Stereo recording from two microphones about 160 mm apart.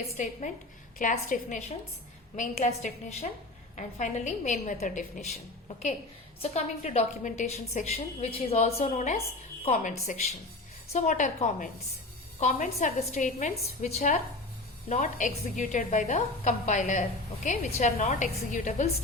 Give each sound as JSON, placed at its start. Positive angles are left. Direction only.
{"t": 0.1, "sound": "a woman's voice", "side_deg": 45}
{"t": 6.4, "sound": "a woman's voice", "side_deg": 40}